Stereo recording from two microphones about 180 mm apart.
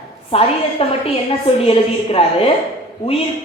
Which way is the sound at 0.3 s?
30° left (ahead or behind).